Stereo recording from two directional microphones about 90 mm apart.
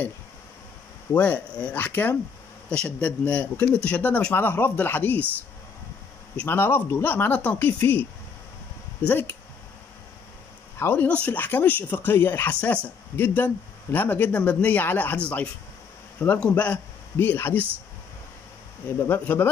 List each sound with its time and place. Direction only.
1.1 s speech: 15° left (ahead or behind)
2.7 s speech: 10° left (ahead or behind)
6.4 s speech: 25° left (ahead or behind)
10.8 s speech: 20° left (ahead or behind)
12.5 s speech: 15° left (ahead or behind)
18.9 s speech: 25° left (ahead or behind)